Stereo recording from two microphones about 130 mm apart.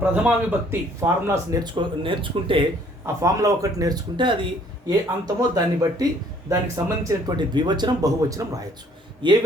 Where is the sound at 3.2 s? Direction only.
25° right (ahead or behind).